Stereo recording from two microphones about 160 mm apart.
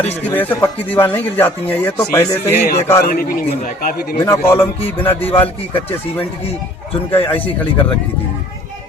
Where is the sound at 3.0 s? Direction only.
65° left (ahead or behind).